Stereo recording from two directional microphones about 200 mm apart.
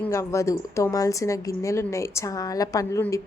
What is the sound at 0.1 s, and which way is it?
A woman's voice, 15° left (ahead or behind).